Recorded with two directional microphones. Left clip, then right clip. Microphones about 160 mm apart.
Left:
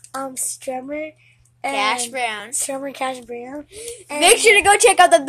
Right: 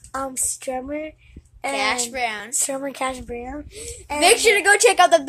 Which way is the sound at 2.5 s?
10° right (ahead or behind).